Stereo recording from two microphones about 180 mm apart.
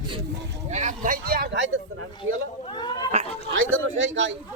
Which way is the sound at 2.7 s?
25° left (ahead or behind).